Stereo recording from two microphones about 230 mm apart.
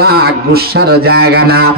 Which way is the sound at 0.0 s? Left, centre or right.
Right.